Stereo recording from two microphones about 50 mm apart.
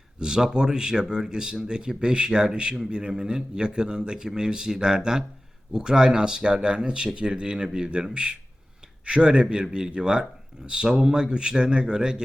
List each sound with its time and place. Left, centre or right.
0.2 s speech: centre